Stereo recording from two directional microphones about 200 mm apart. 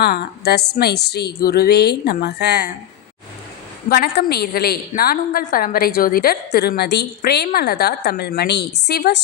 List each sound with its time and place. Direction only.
0.0 s a woman's voice: 55° left (ahead or behind)
3.8 s a woman's voice: 50° left (ahead or behind)